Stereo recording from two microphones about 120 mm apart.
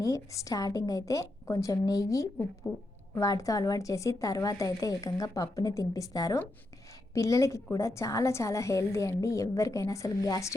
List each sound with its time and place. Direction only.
0.0 s a woman's voice: 25° left (ahead or behind)